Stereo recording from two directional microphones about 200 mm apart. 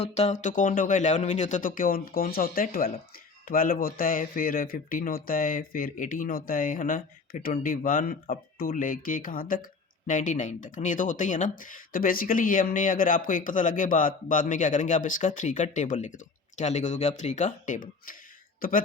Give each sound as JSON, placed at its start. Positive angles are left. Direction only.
{"t": 0.0, "sound": "speech", "side_deg": 35}